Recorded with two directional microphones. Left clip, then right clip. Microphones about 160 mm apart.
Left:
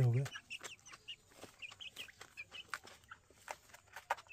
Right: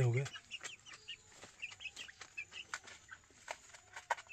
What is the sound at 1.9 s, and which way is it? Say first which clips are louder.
Chicken: even; 25° left (ahead or behind).